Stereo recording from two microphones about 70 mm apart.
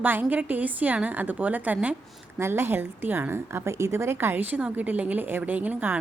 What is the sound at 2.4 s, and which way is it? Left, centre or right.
A woman's voice, right.